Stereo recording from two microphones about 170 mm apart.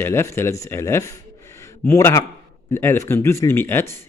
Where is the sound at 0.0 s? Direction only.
15° left (ahead or behind).